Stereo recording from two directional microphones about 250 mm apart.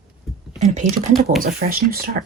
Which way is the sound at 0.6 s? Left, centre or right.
Right.